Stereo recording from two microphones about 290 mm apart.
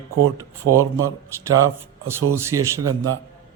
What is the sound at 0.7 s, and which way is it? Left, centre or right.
Speech, right.